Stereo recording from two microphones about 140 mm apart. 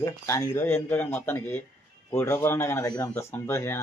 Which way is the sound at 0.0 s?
25° left (ahead or behind).